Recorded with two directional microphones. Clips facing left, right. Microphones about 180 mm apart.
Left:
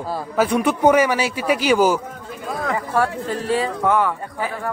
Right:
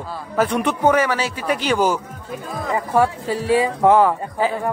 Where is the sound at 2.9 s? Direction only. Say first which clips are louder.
Right 4 dB; 10° right (ahead or behind).